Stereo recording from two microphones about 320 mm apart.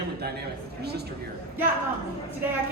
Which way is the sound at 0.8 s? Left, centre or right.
Right.